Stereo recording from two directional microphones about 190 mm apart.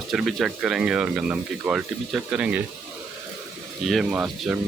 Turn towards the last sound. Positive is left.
turn(degrees=-5)  # may be behind; listen again after turning